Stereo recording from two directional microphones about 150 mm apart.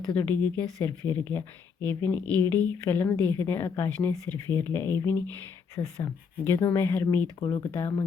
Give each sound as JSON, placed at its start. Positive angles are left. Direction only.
{"t": 0.1, "sound": "speech", "side_deg": 15}